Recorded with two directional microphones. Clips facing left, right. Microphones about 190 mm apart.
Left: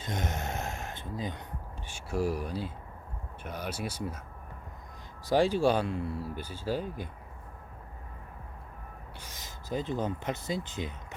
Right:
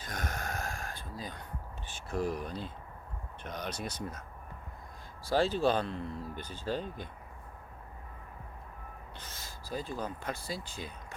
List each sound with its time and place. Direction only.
0.0 s a sound: 25° left (ahead or behind)
1.9 s speech: 10° left (ahead or behind)
5.3 s speech: 15° left (ahead or behind)
9.1 s speech: 15° left (ahead or behind)